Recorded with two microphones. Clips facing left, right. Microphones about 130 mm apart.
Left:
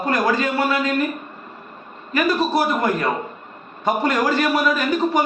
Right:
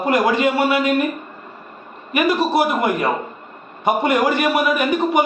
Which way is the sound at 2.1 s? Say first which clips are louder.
Right 2 dB; 20° right (ahead or behind).